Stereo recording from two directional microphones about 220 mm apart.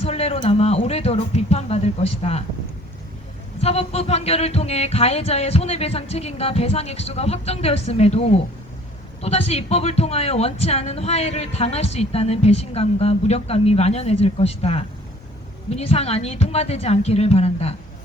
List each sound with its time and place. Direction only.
0.0 s speech: 30° left (ahead or behind)
3.6 s speech: 30° left (ahead or behind)